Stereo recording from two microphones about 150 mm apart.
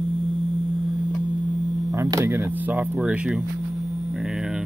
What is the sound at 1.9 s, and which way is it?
Speech, 20° right (ahead or behind).